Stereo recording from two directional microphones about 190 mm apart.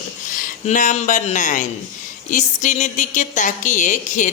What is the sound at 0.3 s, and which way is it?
A woman's voice, 40° left (ahead or behind).